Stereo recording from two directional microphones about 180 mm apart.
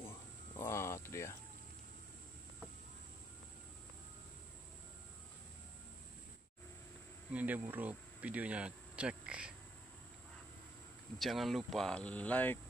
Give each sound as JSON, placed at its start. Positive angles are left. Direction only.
{"t": 0.6, "sound": "speech", "side_deg": 15}
{"t": 7.3, "sound": "speech", "side_deg": -10}
{"t": 11.1, "sound": "speech", "side_deg": 0}